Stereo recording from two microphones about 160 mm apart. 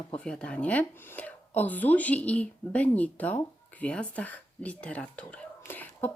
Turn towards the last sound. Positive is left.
turn(degrees=10)  # may be behind; listen again after turning